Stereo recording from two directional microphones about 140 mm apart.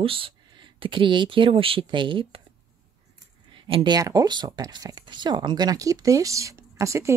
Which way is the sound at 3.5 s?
40° right (ahead or behind).